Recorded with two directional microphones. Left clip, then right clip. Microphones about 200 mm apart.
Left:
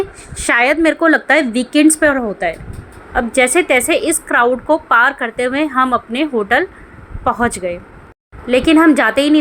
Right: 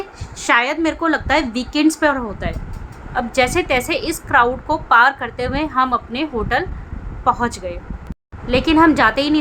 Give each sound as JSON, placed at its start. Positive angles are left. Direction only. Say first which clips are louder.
{"t": 0.3, "sound": "a woman's voice", "louder": "left 3 dB", "side_deg": 25}